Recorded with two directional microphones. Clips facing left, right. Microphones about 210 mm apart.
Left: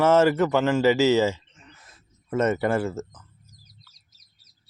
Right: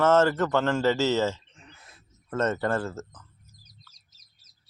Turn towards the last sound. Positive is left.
turn(degrees=10)  # may be behind; listen again after turning